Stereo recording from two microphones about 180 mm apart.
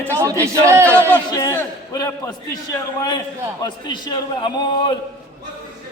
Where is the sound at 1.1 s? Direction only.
15° left (ahead or behind).